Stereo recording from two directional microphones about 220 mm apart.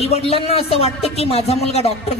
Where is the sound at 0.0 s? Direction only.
25° left (ahead or behind).